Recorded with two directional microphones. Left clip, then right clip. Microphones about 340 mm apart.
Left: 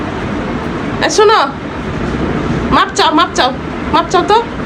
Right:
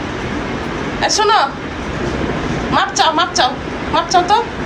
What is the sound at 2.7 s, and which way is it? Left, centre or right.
Speech, centre.